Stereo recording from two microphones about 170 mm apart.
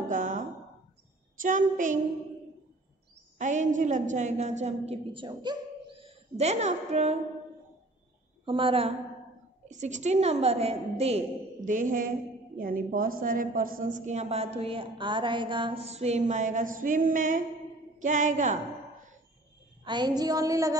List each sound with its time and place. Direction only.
0.1 s a sound: 50° right (ahead or behind)
1.4 s a woman's voice: 50° right (ahead or behind)
3.3 s a woman's voice: 45° right (ahead or behind)
8.5 s a woman's voice: 30° right (ahead or behind)
9.7 s a woman's voice: 45° right (ahead or behind)
19.8 s a sound: 25° right (ahead or behind)